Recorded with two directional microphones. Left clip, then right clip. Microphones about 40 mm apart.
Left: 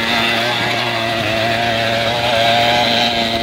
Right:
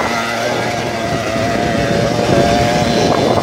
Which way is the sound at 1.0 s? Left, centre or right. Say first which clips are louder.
Even; right.